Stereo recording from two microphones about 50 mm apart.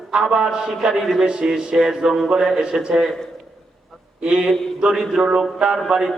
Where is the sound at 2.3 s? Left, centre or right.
Centre.